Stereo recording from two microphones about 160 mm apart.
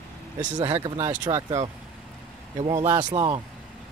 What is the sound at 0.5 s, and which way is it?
Speech, 30° right (ahead or behind).